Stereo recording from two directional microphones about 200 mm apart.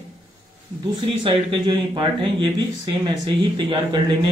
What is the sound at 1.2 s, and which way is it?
Speech, 25° right (ahead or behind).